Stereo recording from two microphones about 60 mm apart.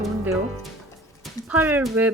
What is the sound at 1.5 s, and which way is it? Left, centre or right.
Speech, right.